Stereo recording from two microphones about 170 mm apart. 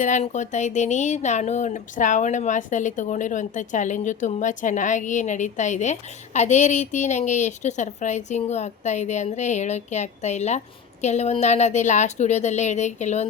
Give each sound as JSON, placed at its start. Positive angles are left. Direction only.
{"t": 0.0, "sound": "speech", "side_deg": 45}